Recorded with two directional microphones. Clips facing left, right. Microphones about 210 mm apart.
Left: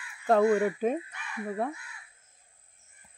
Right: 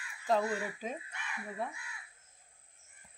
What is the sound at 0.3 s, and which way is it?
Speech, 55° left (ahead or behind).